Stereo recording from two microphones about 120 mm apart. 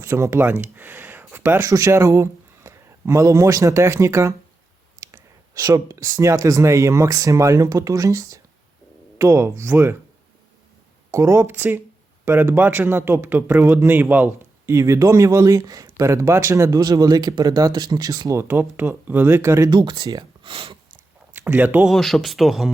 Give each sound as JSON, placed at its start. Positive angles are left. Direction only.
{"t": 0.0, "sound": "speech", "side_deg": -25}
{"t": 11.1, "sound": "speech", "side_deg": -25}
{"t": 14.7, "sound": "speech", "side_deg": -25}
{"t": 19.7, "sound": "speech", "side_deg": -35}
{"t": 21.3, "sound": "speech", "side_deg": -15}
{"t": 21.8, "sound": "speech", "side_deg": 5}